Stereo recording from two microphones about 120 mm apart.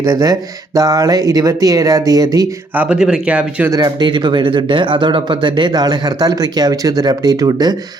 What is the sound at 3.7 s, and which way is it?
Speech, 35° right (ahead or behind).